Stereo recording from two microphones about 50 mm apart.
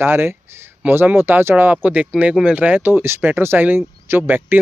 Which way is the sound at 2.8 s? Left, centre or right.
Right.